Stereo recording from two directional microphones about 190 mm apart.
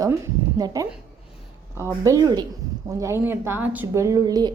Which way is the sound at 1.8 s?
15° right (ahead or behind).